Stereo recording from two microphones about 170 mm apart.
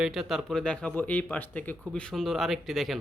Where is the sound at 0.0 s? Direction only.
Centre (ahead or behind).